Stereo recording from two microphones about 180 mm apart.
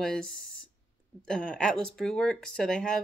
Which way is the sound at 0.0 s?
5° left (ahead or behind).